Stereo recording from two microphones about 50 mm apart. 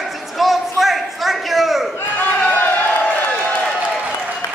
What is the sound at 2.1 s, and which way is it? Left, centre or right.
Crowd, left.